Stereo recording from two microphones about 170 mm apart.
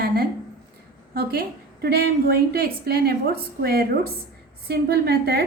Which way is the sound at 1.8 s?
70° right (ahead or behind).